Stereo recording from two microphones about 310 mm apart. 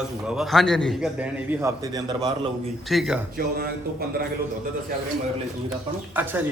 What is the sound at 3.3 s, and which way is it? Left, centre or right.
Speech, right.